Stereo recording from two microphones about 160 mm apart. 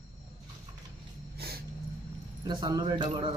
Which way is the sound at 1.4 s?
80° right.